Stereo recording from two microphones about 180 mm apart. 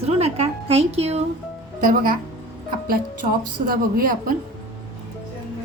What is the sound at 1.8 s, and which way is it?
Speech, 50° right (ahead or behind).